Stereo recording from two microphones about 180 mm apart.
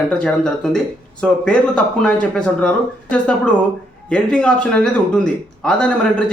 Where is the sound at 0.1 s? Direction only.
5° left (ahead or behind).